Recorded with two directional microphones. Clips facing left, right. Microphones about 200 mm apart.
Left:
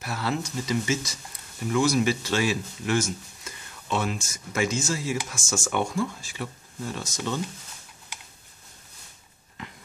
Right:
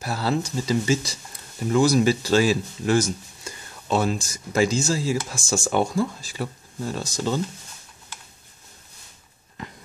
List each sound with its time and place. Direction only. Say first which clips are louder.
0.0 s speech: right 4 dB; 35° right (ahead or behind)